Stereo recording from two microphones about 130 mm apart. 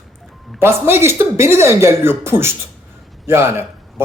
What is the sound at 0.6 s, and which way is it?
Speech, 20° right (ahead or behind).